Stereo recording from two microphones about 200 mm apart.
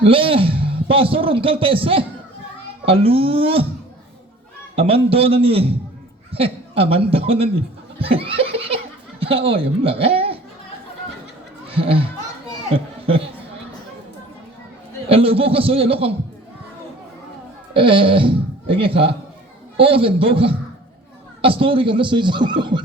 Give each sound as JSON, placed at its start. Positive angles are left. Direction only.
{"t": 0.0, "sound": "a man's voice", "side_deg": -25}
{"t": 4.7, "sound": "a man's voice", "side_deg": -30}
{"t": 7.9, "sound": "laughter", "side_deg": -30}
{"t": 9.2, "sound": "a woman's voice", "side_deg": -25}
{"t": 11.7, "sound": "speech", "side_deg": -30}
{"t": 15.1, "sound": "a man's voice", "side_deg": -30}
{"t": 17.7, "sound": "a man's voice", "side_deg": -25}